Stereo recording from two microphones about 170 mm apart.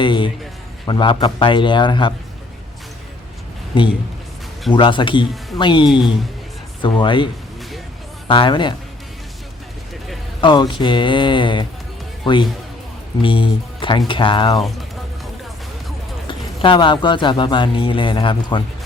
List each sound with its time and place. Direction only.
0.0 s speech: 30° left (ahead or behind)
3.7 s speech: 30° left (ahead or behind)
8.3 s speech: 30° left (ahead or behind)
10.4 s speech: 25° left (ahead or behind)
16.2 s speech: 30° left (ahead or behind)